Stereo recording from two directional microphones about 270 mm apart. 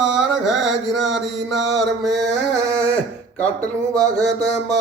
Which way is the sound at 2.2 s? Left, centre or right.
Right.